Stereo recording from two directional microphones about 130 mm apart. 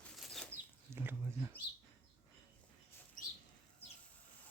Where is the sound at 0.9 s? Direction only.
15° right (ahead or behind).